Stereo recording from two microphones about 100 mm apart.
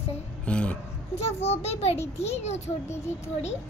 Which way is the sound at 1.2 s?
90° left.